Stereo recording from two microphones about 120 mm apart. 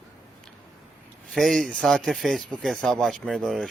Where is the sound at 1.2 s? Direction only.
5° left (ahead or behind).